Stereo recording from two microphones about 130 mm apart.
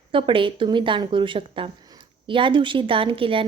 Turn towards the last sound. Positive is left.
turn(degrees=-45)  # may be behind; listen again after turning